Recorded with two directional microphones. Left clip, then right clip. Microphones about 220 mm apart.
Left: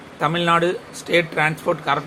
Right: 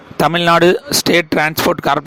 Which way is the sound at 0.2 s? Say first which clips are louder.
Right 7 dB; 55° right (ahead or behind).